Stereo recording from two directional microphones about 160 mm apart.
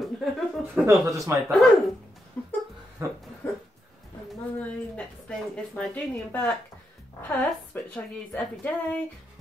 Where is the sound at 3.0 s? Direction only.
15° right (ahead or behind).